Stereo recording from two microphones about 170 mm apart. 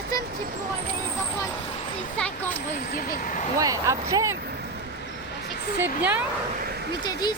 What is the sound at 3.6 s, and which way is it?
Speech, 20° right (ahead or behind).